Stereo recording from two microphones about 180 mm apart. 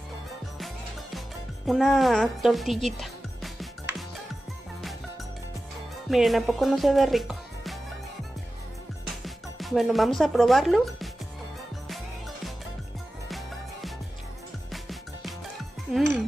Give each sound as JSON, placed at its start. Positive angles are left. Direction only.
{"t": 1.7, "sound": "speech", "side_deg": 0}
{"t": 6.0, "sound": "speech", "side_deg": 0}
{"t": 9.0, "sound": "music", "side_deg": 0}
{"t": 13.3, "sound": "music", "side_deg": 0}